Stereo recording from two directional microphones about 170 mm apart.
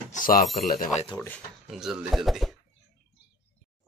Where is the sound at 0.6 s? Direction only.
60° left (ahead or behind).